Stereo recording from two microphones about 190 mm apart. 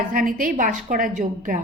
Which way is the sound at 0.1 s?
45° right (ahead or behind).